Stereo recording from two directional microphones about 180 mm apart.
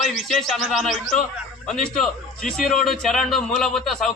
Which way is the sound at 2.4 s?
5° left (ahead or behind).